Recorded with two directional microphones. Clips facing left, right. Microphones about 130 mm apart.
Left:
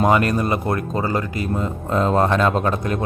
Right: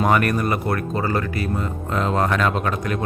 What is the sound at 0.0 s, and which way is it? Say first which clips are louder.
Speech: left 2 dB; 25° left (ahead or behind).